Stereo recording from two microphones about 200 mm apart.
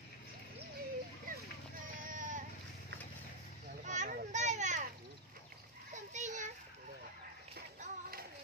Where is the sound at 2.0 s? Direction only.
40° right (ahead or behind).